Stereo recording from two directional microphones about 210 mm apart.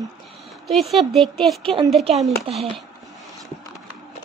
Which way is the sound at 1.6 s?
25° right (ahead or behind).